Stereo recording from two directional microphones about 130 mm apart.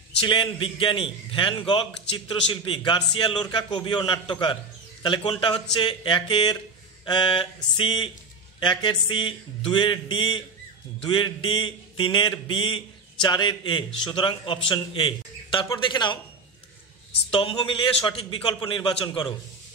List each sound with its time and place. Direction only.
0.2 s a man's voice: 40° left (ahead or behind)
17.3 s a man's voice: 45° left (ahead or behind)